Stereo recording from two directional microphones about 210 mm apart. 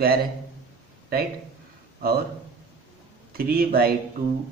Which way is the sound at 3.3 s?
45° right (ahead or behind).